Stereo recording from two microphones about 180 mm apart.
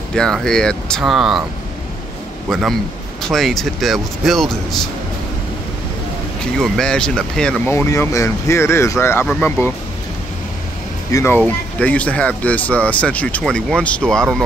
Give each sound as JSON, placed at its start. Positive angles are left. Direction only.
{"t": 0.1, "sound": "speech", "side_deg": 5}
{"t": 3.2, "sound": "speech", "side_deg": 0}
{"t": 6.4, "sound": "speech", "side_deg": 5}
{"t": 11.1, "sound": "speech", "side_deg": 15}